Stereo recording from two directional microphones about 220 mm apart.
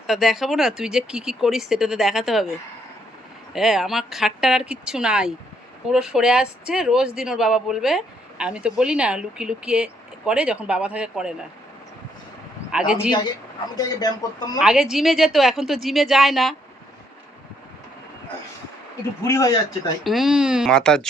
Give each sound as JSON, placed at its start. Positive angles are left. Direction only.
{"t": 0.1, "sound": "speech", "side_deg": 0}
{"t": 12.7, "sound": "speech", "side_deg": -5}
{"t": 13.7, "sound": "speech", "side_deg": 15}
{"t": 14.6, "sound": "speech", "side_deg": -5}
{"t": 19.3, "sound": "speech", "side_deg": 15}
{"t": 20.1, "sound": "speech", "side_deg": 0}